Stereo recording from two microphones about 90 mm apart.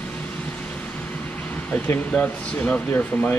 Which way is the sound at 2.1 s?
15° left (ahead or behind).